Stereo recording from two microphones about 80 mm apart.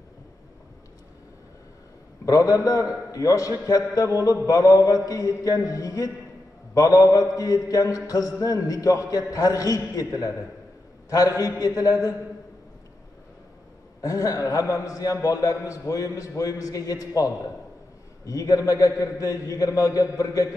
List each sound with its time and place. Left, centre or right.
2.2 s mantra: left
14.0 s mantra: left